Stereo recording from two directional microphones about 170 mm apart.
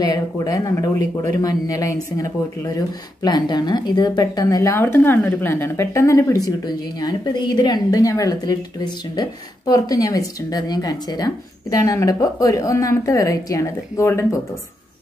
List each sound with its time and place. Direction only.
0.1 s speech: 20° left (ahead or behind)